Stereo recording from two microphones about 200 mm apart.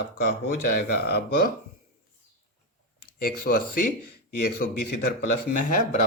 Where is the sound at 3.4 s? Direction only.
45° left (ahead or behind).